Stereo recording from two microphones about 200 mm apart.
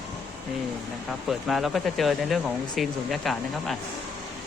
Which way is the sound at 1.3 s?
Centre (ahead or behind).